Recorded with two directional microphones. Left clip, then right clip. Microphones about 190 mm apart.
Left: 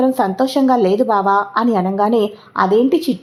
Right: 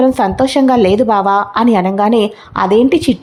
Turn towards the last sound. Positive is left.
turn(degrees=-15)  # may be behind; listen again after turning